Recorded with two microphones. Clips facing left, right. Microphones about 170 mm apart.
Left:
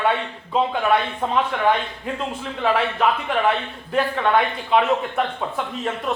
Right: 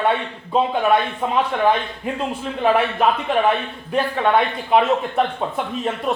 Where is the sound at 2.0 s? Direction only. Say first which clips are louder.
Right 5 dB; 20° right (ahead or behind).